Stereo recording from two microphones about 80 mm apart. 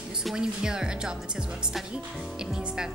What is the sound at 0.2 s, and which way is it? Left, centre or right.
Speech, centre.